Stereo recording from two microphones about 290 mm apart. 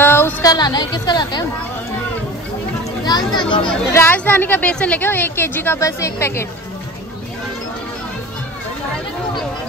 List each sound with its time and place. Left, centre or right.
0.0 s a sound: centre
3.1 s children playing: centre
3.7 s a woman's voice: centre